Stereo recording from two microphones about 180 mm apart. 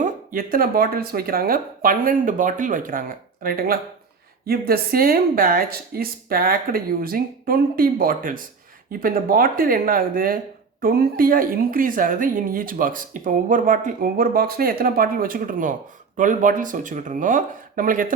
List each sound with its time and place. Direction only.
0.0 s speech: 50° right (ahead or behind)